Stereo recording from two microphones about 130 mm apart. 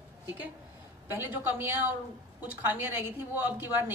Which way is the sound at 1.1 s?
15° right (ahead or behind).